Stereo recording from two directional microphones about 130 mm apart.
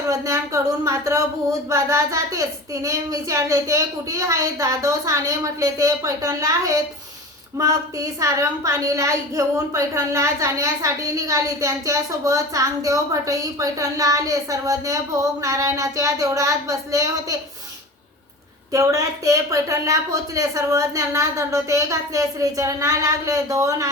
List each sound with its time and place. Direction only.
0.1 s a woman's voice: 25° right (ahead or behind)
18.7 s a woman's voice: 25° right (ahead or behind)